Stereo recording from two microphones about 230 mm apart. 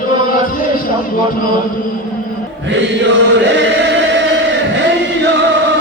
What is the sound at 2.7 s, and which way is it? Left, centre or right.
Chant, right.